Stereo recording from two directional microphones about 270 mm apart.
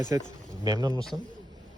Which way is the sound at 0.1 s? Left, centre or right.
Centre.